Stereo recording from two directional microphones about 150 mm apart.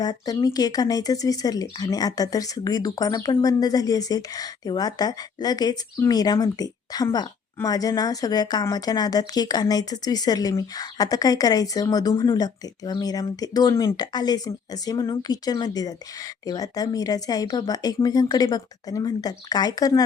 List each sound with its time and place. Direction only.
0.0 s speech: 25° left (ahead or behind)